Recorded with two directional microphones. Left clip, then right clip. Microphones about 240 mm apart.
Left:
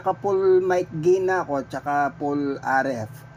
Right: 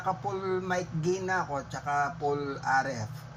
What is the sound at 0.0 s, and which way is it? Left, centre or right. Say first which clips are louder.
Speech: left 10 dB; left.